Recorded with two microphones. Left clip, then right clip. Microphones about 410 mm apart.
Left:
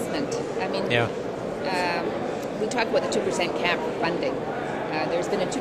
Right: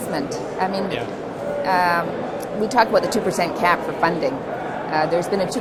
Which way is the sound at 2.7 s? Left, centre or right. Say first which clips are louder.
Right 8 dB; right.